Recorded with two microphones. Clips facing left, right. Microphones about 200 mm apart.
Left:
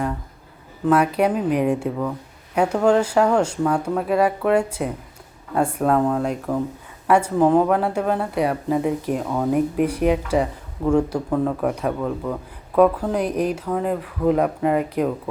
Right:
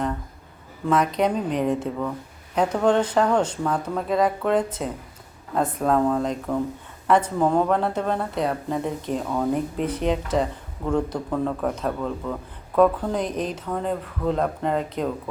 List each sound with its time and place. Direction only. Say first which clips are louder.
0.9 s speech: left 3 dB; 10° left (ahead or behind)